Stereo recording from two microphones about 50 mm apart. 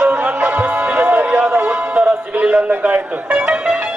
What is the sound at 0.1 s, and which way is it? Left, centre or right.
Music, right.